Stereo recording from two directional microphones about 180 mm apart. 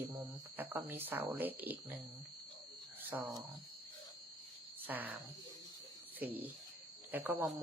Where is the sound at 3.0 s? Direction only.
10° right (ahead or behind).